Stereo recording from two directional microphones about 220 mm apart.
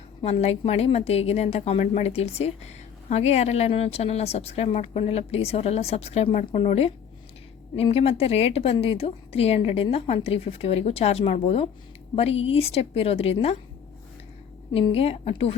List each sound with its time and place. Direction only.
0.2 s a woman's voice: 25° left (ahead or behind)
14.7 s a woman's voice: 25° left (ahead or behind)